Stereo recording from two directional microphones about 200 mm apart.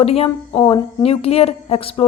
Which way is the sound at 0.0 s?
30° left (ahead or behind).